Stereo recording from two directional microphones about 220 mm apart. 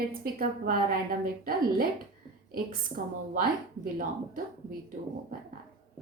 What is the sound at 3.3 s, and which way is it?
Speech, 40° right (ahead or behind).